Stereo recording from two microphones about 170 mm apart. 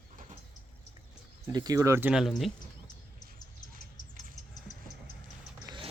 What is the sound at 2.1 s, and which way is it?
Speech, centre (ahead or behind).